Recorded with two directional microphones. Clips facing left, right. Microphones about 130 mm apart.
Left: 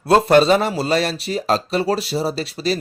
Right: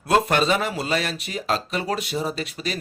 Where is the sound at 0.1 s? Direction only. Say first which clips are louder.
Left 7 dB; 35° left (ahead or behind).